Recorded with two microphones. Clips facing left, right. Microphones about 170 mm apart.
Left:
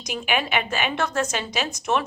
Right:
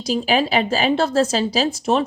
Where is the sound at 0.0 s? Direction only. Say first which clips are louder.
Right 7 dB; 30° right (ahead or behind).